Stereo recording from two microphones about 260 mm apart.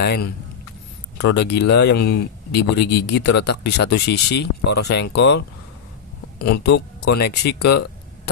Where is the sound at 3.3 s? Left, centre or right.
Left.